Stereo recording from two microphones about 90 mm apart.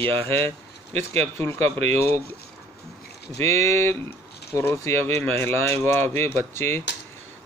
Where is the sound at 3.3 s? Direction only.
30° left (ahead or behind).